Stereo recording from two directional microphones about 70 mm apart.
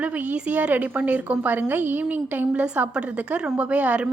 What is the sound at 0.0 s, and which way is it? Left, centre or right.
A woman's voice, centre.